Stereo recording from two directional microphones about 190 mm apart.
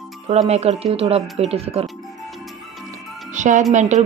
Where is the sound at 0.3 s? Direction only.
35° right (ahead or behind).